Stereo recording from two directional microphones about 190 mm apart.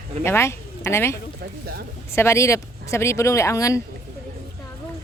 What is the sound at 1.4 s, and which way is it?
Speech, 60° right (ahead or behind).